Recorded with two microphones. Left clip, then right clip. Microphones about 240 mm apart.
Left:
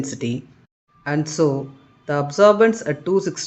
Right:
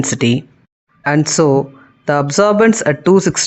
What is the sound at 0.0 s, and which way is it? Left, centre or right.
A man's voice, right.